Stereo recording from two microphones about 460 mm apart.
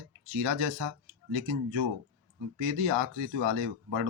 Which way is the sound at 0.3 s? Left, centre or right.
Right.